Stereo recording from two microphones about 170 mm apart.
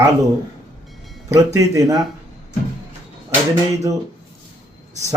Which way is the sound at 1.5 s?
20° right (ahead or behind).